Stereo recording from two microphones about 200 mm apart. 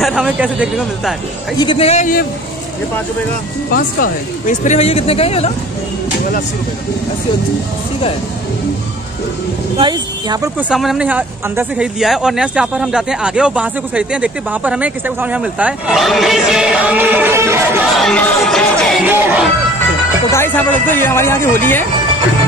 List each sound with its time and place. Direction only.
0.0 s speech: 5° right (ahead or behind)
1.6 s speech: 25° left (ahead or behind)
3.7 s speech: 40° left (ahead or behind)
9.8 s speech: 20° right (ahead or behind)
10.7 s speech: centre (ahead or behind)
17.9 s speech: centre (ahead or behind)
19.0 s speech: 5° right (ahead or behind)
20.2 s speech: 10° left (ahead or behind)